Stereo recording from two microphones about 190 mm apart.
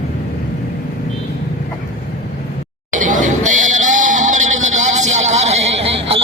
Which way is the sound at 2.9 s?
40° right (ahead or behind).